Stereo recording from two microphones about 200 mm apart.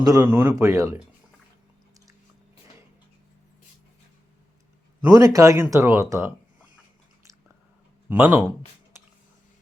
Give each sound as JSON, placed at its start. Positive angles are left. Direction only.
{"t": 0.0, "sound": "speech", "side_deg": -20}
{"t": 5.0, "sound": "speech", "side_deg": -20}
{"t": 8.1, "sound": "speech", "side_deg": -5}